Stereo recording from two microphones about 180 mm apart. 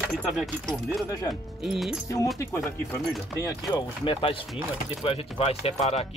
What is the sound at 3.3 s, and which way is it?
Speech, 25° left (ahead or behind).